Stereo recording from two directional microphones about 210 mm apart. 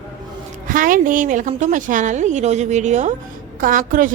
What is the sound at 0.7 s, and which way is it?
Speech, 40° right (ahead or behind).